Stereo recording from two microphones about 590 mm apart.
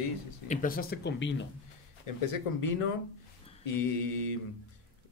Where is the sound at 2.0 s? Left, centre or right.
Left.